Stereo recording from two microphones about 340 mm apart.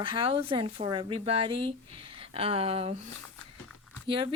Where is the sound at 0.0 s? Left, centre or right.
Centre.